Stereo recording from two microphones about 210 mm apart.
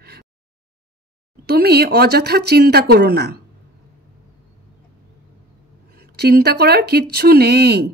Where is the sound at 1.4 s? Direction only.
50° right (ahead or behind).